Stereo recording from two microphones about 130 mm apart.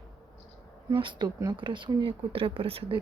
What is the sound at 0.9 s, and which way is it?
Speech, 40° right (ahead or behind).